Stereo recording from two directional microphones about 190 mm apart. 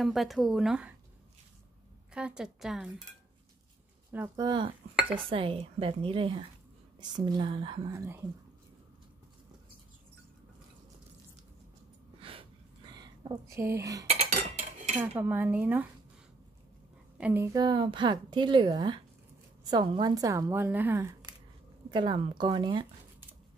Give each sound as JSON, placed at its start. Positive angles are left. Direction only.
{"t": 0.0, "sound": "speech", "side_deg": 0}
{"t": 2.1, "sound": "speech", "side_deg": -5}
{"t": 4.1, "sound": "speech", "side_deg": -10}
{"t": 4.5, "sound": "a woman's voice", "side_deg": -25}
{"t": 12.2, "sound": "a sound", "side_deg": -30}
{"t": 14.0, "sound": "cutlery", "side_deg": -35}
{"t": 15.0, "sound": "speech", "side_deg": -10}
{"t": 17.2, "sound": "a woman's voice", "side_deg": -10}